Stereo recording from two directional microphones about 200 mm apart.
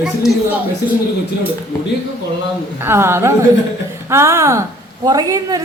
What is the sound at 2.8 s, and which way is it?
A woman's voice, 10° right (ahead or behind).